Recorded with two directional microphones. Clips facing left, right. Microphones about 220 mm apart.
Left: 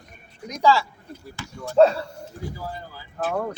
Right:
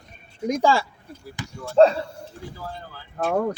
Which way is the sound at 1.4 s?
15° right (ahead or behind).